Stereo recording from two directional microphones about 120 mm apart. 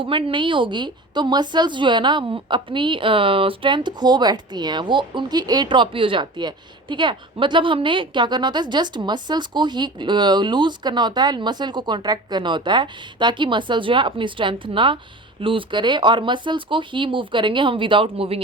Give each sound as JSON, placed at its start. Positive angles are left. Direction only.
{"t": 0.0, "sound": "a woman's voice", "side_deg": -45}